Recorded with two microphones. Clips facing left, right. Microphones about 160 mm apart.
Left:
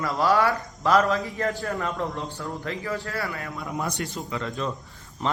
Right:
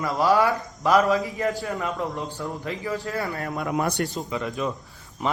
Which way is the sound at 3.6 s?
65° right (ahead or behind).